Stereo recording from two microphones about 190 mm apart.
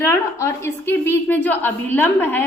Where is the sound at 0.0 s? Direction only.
15° left (ahead or behind).